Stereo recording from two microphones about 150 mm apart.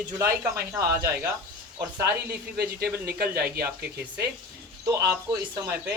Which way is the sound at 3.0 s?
90° right.